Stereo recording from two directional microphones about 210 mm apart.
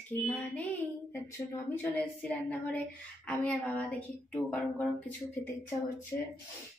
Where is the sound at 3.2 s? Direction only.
5° left (ahead or behind).